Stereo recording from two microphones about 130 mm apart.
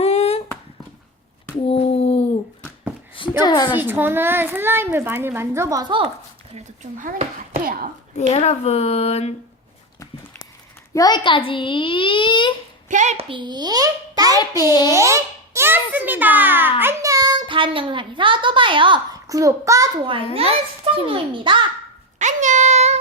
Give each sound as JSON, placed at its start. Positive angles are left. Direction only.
{"t": 0.0, "sound": "a sound", "side_deg": 55}
{"t": 1.6, "sound": "a sound", "side_deg": 50}
{"t": 3.4, "sound": "a child's voice", "side_deg": 35}
{"t": 3.8, "sound": "a child's voice", "side_deg": -15}
{"t": 7.0, "sound": "speech", "side_deg": -90}
{"t": 8.3, "sound": "speech", "side_deg": 55}
{"t": 10.9, "sound": "a child's voice", "side_deg": 30}
{"t": 12.9, "sound": "a child's voice", "side_deg": -70}
{"t": 13.1, "sound": "a child's voice", "side_deg": -40}
{"t": 14.6, "sound": "a child's voice", "side_deg": 30}
{"t": 14.8, "sound": "a child's voice", "side_deg": -25}
{"t": 19.1, "sound": "a child's voice", "side_deg": -25}
{"t": 20.0, "sound": "a child's voice", "side_deg": -40}
{"t": 22.2, "sound": "speech", "side_deg": -70}